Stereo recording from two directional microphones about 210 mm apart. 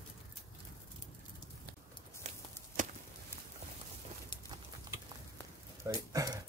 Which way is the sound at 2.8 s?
35° right (ahead or behind).